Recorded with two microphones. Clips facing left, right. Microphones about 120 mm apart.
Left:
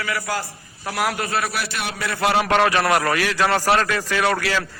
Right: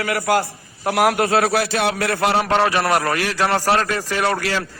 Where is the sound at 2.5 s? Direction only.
10° right (ahead or behind).